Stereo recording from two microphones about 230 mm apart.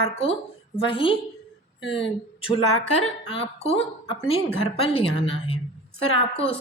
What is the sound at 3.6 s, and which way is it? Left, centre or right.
Speech, left.